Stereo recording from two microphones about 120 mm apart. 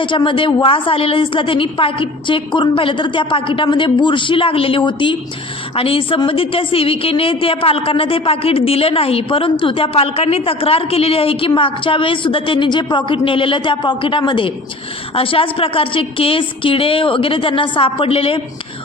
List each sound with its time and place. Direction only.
0.0 s a woman's voice: 45° left (ahead or behind)